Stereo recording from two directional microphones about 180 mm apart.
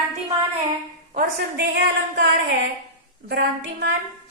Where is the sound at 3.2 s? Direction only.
70° right (ahead or behind).